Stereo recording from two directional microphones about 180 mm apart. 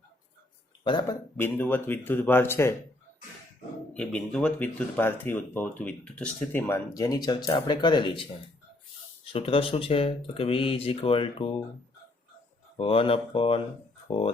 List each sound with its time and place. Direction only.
1.4 s speech: 10° left (ahead or behind)
3.9 s speech: 5° left (ahead or behind); by 11.5 s 30° left (ahead or behind)
12.7 s speech: 30° left (ahead or behind)